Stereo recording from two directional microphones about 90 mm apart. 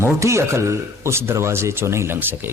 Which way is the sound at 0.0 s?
30° right (ahead or behind).